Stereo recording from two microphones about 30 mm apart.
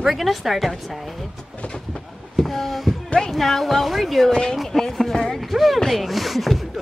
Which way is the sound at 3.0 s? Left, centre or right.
Left.